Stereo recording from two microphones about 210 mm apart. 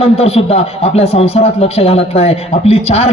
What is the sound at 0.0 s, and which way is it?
Speech, 30° left (ahead or behind).